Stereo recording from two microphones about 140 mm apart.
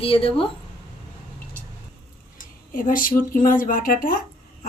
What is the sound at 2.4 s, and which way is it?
Speech, 75° left (ahead or behind).